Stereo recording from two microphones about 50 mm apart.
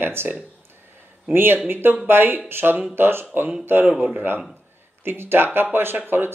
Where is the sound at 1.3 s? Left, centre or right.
Right.